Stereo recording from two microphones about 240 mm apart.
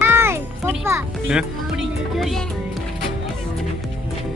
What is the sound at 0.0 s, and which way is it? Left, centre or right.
Music, centre.